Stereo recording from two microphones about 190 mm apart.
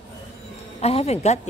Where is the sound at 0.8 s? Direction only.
35° left (ahead or behind).